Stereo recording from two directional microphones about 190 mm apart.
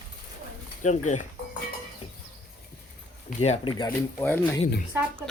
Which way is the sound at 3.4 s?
30° left (ahead or behind).